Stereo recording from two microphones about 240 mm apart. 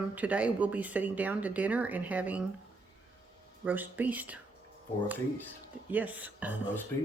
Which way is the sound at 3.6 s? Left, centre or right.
Centre.